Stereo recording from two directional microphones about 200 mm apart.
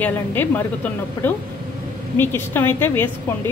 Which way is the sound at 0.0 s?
10° left (ahead or behind).